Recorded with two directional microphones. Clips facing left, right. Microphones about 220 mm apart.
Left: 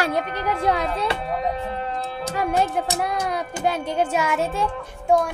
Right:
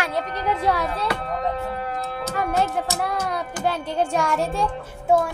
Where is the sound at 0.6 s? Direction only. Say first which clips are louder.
Left 3 dB; 15° left (ahead or behind).